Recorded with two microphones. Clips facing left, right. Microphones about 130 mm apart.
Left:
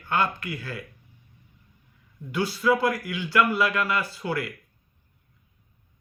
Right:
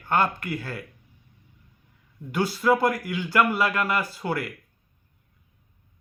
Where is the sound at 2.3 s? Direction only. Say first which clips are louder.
Right 1 dB; 45° right (ahead or behind).